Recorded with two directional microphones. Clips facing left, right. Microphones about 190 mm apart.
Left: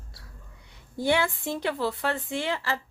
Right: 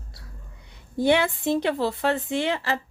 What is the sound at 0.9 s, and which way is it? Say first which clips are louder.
Speech: right 4 dB; 20° right (ahead or behind).